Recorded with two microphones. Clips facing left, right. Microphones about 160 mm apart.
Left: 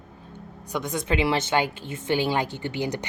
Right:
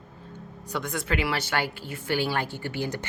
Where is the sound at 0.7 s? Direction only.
20° left (ahead or behind).